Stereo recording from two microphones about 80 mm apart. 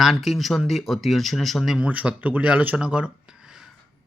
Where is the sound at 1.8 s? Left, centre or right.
Centre.